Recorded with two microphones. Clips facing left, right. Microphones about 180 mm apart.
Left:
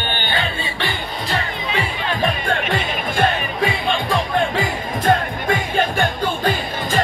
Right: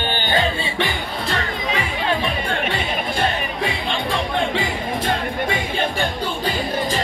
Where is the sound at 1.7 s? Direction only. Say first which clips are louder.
Right 1 dB; 45° left (ahead or behind).